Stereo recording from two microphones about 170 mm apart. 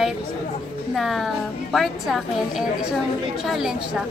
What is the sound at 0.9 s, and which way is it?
A woman's voice, centre (ahead or behind).